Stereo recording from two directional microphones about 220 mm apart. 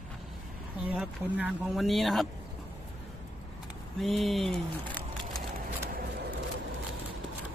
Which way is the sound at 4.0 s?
Centre (ahead or behind).